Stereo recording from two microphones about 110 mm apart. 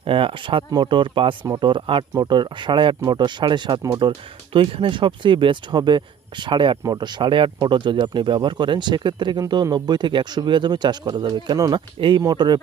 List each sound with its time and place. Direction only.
0.0 s speech: 55° right (ahead or behind); by 11.8 s 35° right (ahead or behind)
11.9 s speech: 50° right (ahead or behind)
12.2 s speech: 40° right (ahead or behind)